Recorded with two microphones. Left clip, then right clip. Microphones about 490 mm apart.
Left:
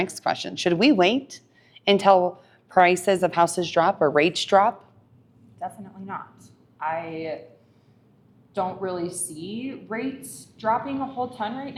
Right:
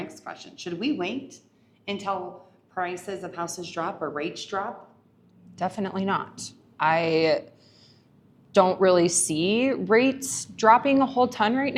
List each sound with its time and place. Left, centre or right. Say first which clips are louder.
0.0 s speech: left 12 dB; left
5.5 s a woman's voice: right 6 dB; right
8.5 s a woman's voice: right 9 dB; right